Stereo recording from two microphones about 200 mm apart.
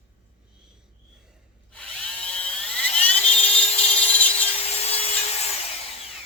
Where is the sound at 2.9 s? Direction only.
30° left (ahead or behind).